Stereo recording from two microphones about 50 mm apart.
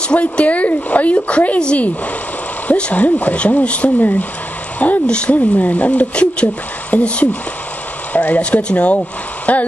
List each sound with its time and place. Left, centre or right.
0.1 s speech: left
2.7 s speech: left
4.0 s speech: left
5.0 s speech: left
8.4 s speech: left